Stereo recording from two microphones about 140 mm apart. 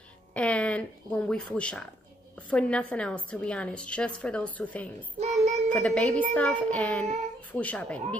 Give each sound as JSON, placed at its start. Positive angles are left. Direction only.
{"t": 0.3, "sound": "a woman's voice", "side_deg": 10}
{"t": 5.2, "sound": "child singing", "side_deg": -50}
{"t": 5.7, "sound": "a woman's voice", "side_deg": 10}